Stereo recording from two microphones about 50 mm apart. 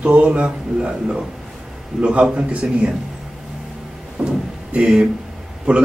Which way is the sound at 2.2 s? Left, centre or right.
Centre.